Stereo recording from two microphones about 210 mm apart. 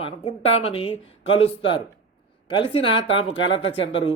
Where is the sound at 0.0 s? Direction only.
25° left (ahead or behind).